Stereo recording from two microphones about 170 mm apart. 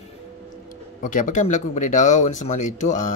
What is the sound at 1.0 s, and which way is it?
Speech, 50° left (ahead or behind).